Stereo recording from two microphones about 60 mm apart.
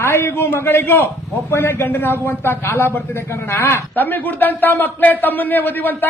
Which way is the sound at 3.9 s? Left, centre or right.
Left.